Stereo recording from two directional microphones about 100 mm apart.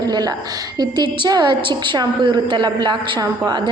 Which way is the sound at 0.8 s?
50° right (ahead or behind).